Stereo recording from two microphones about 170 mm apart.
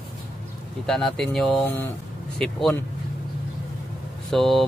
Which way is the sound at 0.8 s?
5° left (ahead or behind).